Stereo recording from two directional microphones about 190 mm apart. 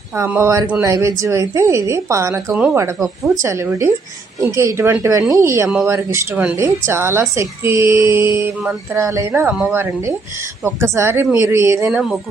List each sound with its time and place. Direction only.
0.2 s a woman's voice: 15° right (ahead or behind)
11.9 s speech: centre (ahead or behind)